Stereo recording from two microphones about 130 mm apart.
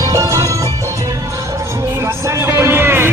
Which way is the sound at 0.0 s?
25° right (ahead or behind).